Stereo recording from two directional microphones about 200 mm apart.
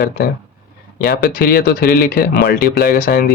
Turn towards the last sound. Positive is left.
turn(degrees=45)  # may be behind; listen again after turning